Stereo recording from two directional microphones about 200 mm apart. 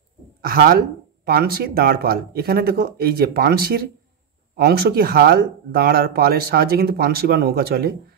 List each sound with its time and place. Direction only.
0.4 s speech: 50° right (ahead or behind)